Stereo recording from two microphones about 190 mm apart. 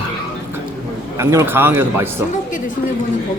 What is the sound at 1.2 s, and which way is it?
Speech, 15° right (ahead or behind).